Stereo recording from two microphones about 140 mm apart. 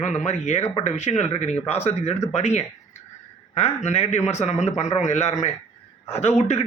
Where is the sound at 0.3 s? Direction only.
55° left (ahead or behind).